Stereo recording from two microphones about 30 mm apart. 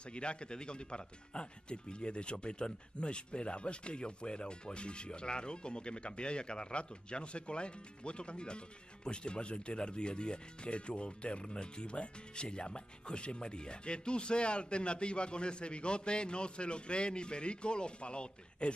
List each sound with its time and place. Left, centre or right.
0.1 s a man's voice: left